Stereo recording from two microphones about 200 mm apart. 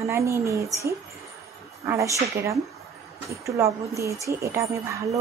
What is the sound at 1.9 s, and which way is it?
A woman's voice, 15° right (ahead or behind).